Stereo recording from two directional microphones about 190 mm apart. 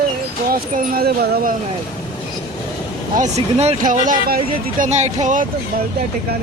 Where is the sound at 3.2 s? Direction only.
35° right (ahead or behind).